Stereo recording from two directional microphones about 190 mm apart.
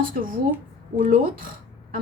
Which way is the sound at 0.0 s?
45° right (ahead or behind).